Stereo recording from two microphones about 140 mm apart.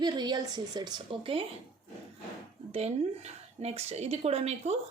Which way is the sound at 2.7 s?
50° right (ahead or behind).